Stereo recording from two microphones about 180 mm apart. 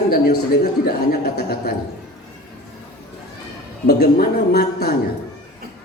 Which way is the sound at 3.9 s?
65° left (ahead or behind).